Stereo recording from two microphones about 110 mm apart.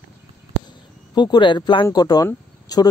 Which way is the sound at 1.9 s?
35° left (ahead or behind).